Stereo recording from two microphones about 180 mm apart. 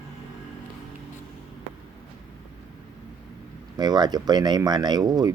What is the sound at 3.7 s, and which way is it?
Speech, 25° right (ahead or behind).